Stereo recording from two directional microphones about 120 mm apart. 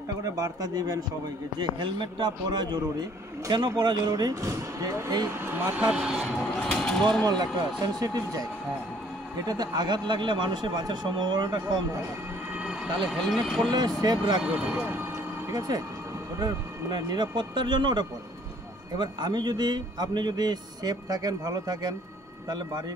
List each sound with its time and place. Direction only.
0.4 s a man's voice: 30° right (ahead or behind); by 6.4 s 5° right (ahead or behind)
6.7 s speech: 5° left (ahead or behind)
7.2 s a man's voice: 35° right (ahead or behind)
9.5 s a man's voice: 35° right (ahead or behind)
13.1 s speech: centre (ahead or behind)
13.7 s a man's voice: 35° right (ahead or behind)
14.4 s speech: 10° right (ahead or behind)
15.5 s a man's voice: 30° right (ahead or behind)